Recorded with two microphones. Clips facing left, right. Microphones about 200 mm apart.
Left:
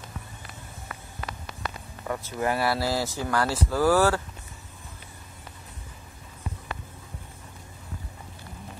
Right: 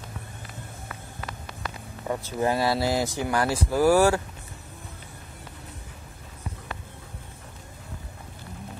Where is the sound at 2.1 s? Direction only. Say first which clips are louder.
Right 2 dB; 20° right (ahead or behind).